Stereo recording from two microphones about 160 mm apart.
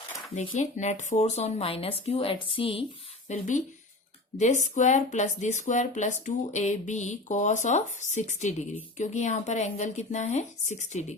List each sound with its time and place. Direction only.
0.5 s speech: 45° left (ahead or behind)
3.2 s speech: 50° left (ahead or behind)